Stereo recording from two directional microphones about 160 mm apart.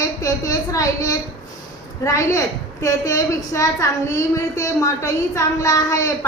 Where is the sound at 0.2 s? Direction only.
20° left (ahead or behind).